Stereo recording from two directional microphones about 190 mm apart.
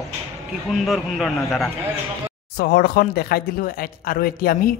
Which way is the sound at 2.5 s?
55° left (ahead or behind).